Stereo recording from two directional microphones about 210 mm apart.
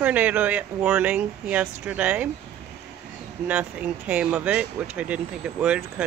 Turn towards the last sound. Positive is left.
turn(degrees=-5)  # may be behind; listen again after turning